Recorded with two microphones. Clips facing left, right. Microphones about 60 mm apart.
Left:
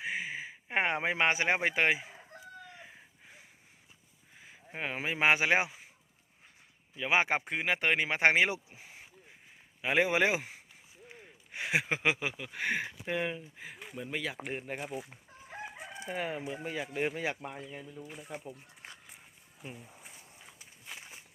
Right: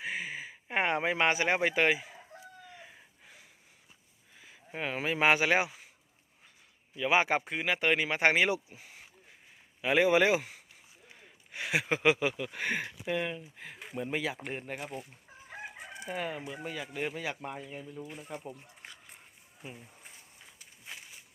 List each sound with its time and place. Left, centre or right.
0.0 s a sound: centre
4.7 s speech: centre
6.9 s speech: left
11.1 s a sound: left
11.9 s speech: centre
13.6 s speech: centre
14.3 s speech: centre
15.4 s chicken: centre
16.0 s speech: centre
19.6 s speech: centre